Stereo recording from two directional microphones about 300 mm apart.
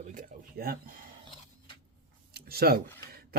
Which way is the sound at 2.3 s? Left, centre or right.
Right.